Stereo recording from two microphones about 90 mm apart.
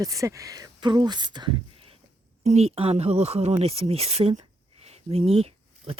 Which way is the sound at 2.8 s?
90° right.